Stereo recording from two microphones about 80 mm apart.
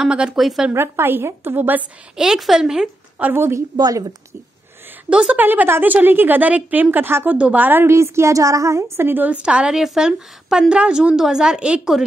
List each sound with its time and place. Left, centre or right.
0.0 s a woman's voice: centre
0.4 s a woman's voice: centre
0.7 s a woman's voice: right
2.1 s a woman's voice: centre
3.2 s a woman's voice: right
3.7 s a woman's voice: right
5.1 s a woman's voice: centre
5.4 s a woman's voice: right
7.9 s a woman's voice: right
9.4 s a woman's voice: centre